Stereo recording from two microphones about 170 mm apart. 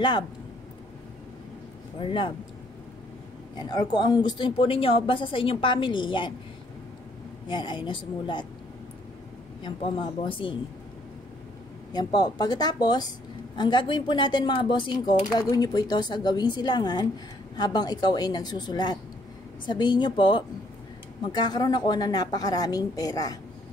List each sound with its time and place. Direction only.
2.0 s speech: 30° left (ahead or behind)
3.5 s speech: 25° left (ahead or behind)
7.4 s speech: 25° left (ahead or behind)
9.6 s a woman's voice: 30° left (ahead or behind)
11.9 s speech: 25° left (ahead or behind)